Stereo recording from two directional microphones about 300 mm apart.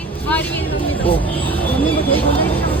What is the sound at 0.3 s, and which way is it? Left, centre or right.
Vehicle, centre.